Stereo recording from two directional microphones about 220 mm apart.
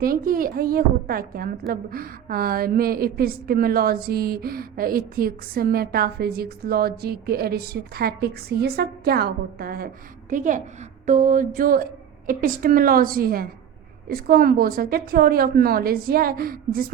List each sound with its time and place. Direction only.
0.0 s a woman's voice: 40° right (ahead or behind)